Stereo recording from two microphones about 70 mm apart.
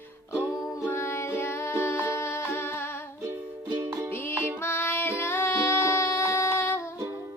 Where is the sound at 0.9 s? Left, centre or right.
Left.